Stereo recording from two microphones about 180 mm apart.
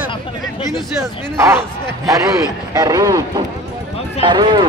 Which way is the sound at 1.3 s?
15° right (ahead or behind).